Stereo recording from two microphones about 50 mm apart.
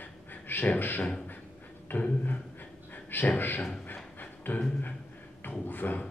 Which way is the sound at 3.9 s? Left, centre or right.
Left.